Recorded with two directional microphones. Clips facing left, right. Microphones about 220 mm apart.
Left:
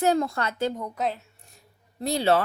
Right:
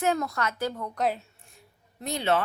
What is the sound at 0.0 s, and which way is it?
Speech, 30° left (ahead or behind).